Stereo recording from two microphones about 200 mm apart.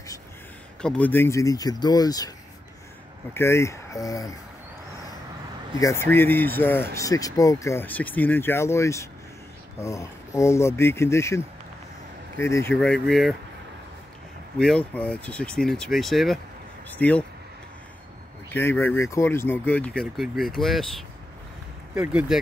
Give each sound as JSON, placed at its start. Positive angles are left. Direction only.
{"t": 0.7, "sound": "speech", "side_deg": 5}
{"t": 3.3, "sound": "speech", "side_deg": 15}
{"t": 5.8, "sound": "speech", "side_deg": 15}
{"t": 12.7, "sound": "speech", "side_deg": 0}
{"t": 14.6, "sound": "speech", "side_deg": 5}
{"t": 18.5, "sound": "speech", "side_deg": 10}
{"t": 21.9, "sound": "speech", "side_deg": -5}